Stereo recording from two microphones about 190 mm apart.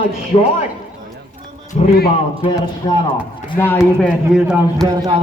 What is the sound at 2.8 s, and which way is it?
Speech, 25° left (ahead or behind).